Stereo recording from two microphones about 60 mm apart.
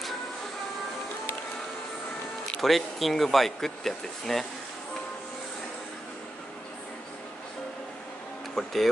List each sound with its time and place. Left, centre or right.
2.6 s speech: centre
8.6 s speech: centre